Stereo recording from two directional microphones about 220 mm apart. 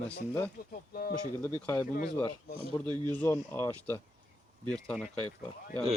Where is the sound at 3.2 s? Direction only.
10° left (ahead or behind).